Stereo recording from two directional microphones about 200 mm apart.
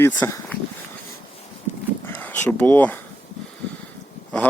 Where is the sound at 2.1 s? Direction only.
10° left (ahead or behind).